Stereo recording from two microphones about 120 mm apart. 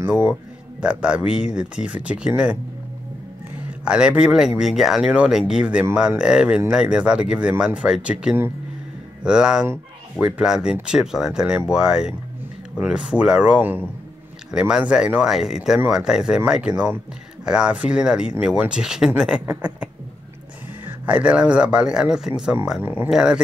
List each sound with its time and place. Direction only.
0.0 s speech: 20° right (ahead or behind)
0.3 s speech: 10° right (ahead or behind)
3.8 s speech: 10° right (ahead or behind)
21.0 s speech: 10° right (ahead or behind)